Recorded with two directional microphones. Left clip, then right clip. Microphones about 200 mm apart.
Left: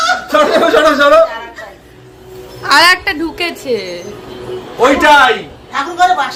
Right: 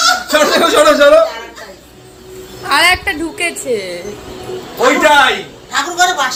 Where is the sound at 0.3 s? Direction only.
10° left (ahead or behind).